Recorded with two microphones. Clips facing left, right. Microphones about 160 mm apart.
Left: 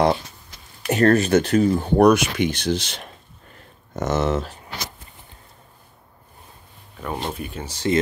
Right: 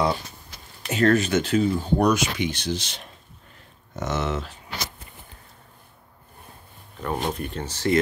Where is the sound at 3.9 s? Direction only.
45° left (ahead or behind).